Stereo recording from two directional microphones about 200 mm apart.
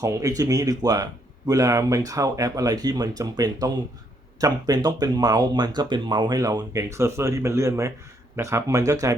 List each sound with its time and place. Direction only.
0.0 s speech: 15° right (ahead or behind)